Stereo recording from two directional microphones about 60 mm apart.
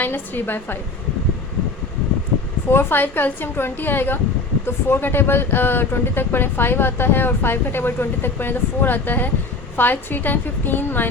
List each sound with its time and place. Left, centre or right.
0.0 s speech: left
2.6 s speech: left